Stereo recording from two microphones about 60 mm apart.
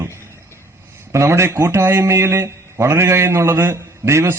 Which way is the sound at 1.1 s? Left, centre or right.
Right.